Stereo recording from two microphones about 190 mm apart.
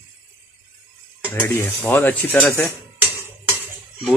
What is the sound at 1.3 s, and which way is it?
Speech, 10° left (ahead or behind).